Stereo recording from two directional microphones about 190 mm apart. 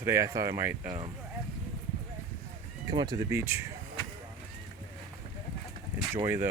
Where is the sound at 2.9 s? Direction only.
20° right (ahead or behind).